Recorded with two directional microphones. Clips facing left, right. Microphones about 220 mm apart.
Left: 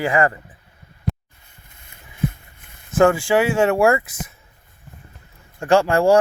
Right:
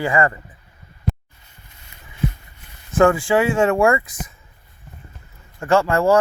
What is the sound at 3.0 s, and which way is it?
Speech, centre (ahead or behind).